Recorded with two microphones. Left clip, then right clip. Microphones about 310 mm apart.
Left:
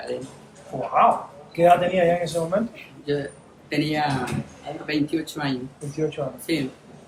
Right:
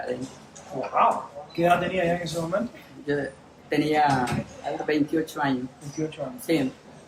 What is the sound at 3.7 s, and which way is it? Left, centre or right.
Speech, centre.